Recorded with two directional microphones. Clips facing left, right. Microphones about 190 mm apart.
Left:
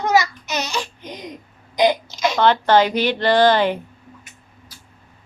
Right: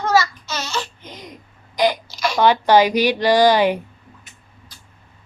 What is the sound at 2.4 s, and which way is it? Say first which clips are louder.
A woman's voice: right 2 dB; 10° right (ahead or behind).